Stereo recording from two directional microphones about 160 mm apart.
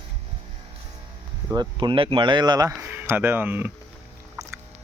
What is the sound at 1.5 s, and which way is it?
Speech, 30° right (ahead or behind).